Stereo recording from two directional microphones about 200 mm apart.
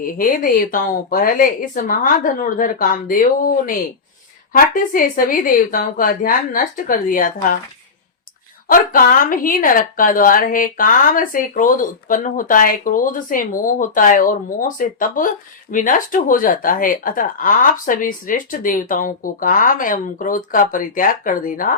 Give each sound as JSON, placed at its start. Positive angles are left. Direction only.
{"t": 0.0, "sound": "a woman's voice", "side_deg": 45}
{"t": 8.6, "sound": "a woman's voice", "side_deg": 45}